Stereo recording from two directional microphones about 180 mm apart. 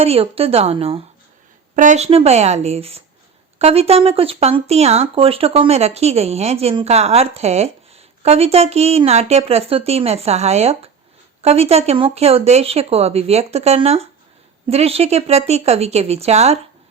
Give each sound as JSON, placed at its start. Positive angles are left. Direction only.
{"t": 0.0, "sound": "speech", "side_deg": -35}
{"t": 1.7, "sound": "speech", "side_deg": -45}